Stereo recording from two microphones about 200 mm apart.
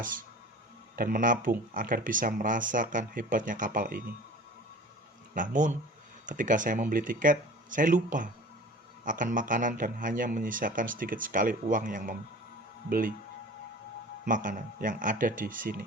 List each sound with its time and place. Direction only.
0.9 s speech: 45° right (ahead or behind)
5.3 s speech: 40° right (ahead or behind)
14.3 s speech: 40° right (ahead or behind)